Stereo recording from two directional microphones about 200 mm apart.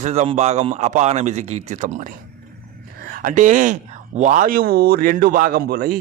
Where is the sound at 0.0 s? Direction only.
35° right (ahead or behind).